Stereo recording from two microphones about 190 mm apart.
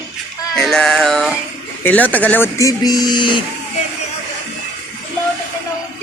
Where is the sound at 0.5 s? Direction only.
Centre (ahead or behind).